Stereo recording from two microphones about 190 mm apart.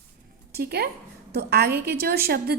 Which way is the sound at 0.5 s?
55° right (ahead or behind).